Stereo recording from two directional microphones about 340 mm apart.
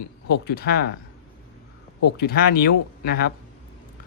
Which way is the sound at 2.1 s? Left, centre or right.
Left.